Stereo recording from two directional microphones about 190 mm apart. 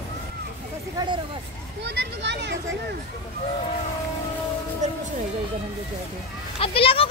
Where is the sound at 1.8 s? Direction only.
65° right (ahead or behind).